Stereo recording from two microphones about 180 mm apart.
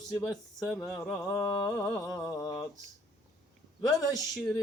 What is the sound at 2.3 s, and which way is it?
Speech, 20° left (ahead or behind).